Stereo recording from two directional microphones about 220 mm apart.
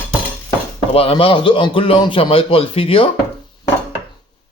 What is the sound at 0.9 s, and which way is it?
Speech, 25° left (ahead or behind).